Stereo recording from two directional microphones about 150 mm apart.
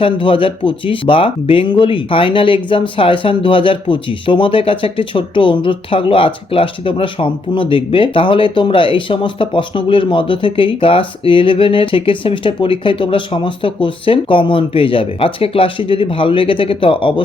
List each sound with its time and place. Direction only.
0.0 s speech: 35° left (ahead or behind)